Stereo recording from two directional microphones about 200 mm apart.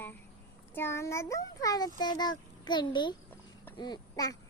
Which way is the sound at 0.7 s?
10° left (ahead or behind).